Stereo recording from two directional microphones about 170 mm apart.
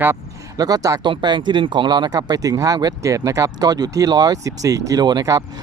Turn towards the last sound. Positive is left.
turn(degrees=-20)  # may be behind; listen again after turning